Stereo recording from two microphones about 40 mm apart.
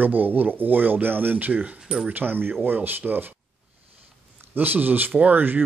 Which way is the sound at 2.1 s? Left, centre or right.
Right.